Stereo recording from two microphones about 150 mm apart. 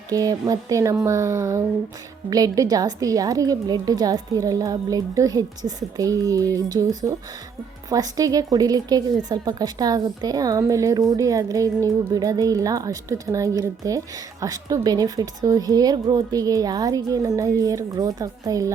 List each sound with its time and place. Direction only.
0.1 s a woman's voice: 25° right (ahead or behind)